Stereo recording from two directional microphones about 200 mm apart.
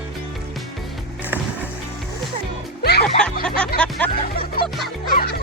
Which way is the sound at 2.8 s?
50° left (ahead or behind).